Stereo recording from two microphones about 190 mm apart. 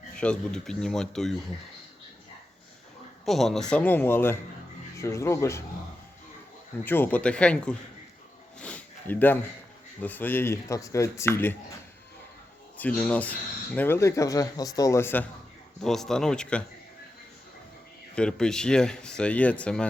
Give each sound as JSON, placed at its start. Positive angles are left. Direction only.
{"t": 0.2, "sound": "speech", "side_deg": 5}
{"t": 3.2, "sound": "speech", "side_deg": 0}
{"t": 6.8, "sound": "speech", "side_deg": 10}
{"t": 8.5, "sound": "a sound", "side_deg": 5}
{"t": 10.0, "sound": "speech", "side_deg": 10}
{"t": 12.7, "sound": "speech", "side_deg": 10}
{"t": 18.1, "sound": "speech", "side_deg": 5}